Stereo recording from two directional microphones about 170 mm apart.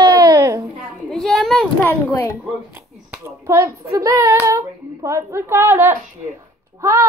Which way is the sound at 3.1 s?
15° right (ahead or behind).